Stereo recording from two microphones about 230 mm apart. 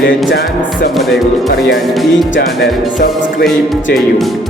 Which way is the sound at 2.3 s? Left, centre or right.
Left.